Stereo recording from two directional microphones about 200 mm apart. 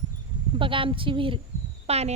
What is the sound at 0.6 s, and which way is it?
A woman's voice, 25° right (ahead or behind).